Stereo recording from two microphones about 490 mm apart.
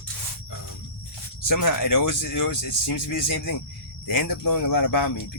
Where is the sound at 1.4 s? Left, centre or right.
Left.